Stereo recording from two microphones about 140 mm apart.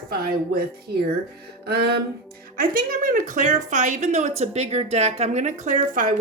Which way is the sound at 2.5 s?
90° right.